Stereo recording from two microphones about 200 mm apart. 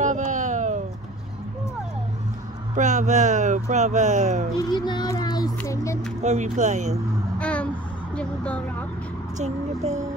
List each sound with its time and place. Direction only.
0.0 s a sound: 40° right (ahead or behind)
2.7 s speech: 35° right (ahead or behind)
4.6 s a child's voice: 20° left (ahead or behind)
6.2 s speech: 35° right (ahead or behind)
7.3 s a sound: 5° left (ahead or behind)
9.4 s speech: 35° right (ahead or behind)